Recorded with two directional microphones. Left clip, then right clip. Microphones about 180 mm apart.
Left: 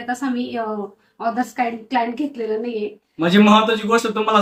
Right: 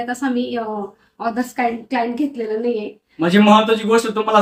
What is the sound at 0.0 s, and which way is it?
A woman's voice, 10° right (ahead or behind).